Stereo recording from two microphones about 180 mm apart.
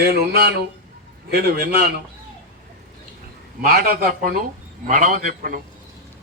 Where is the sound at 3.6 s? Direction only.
55° right (ahead or behind).